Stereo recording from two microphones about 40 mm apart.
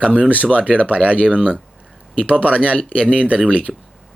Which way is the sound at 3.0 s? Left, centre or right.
Right.